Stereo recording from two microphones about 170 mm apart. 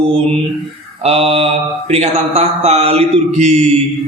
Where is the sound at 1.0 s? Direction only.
35° right (ahead or behind).